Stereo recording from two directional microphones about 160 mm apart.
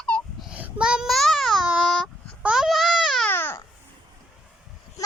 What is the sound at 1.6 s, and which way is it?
Speech, 10° right (ahead or behind).